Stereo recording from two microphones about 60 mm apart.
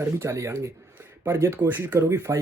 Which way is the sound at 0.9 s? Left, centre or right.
Right.